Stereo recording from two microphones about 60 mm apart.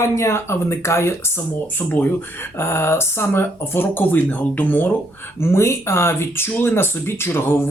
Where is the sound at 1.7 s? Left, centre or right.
Left.